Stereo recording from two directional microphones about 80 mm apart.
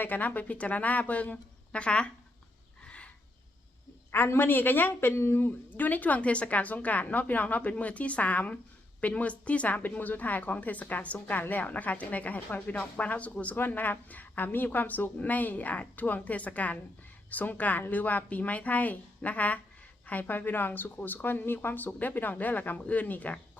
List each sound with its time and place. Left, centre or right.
0.0 s a woman's voice: left
2.8 s a sound: centre
4.1 s a woman's voice: left